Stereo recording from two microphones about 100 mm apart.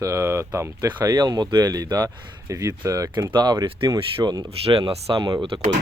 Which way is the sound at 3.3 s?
50° right (ahead or behind).